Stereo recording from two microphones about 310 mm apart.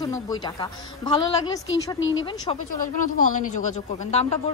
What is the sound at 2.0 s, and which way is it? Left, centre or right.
Speech, left.